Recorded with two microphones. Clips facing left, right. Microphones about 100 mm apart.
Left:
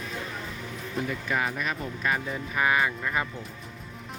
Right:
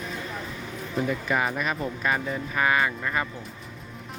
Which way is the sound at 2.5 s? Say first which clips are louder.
Right 1 dB; 5° left (ahead or behind).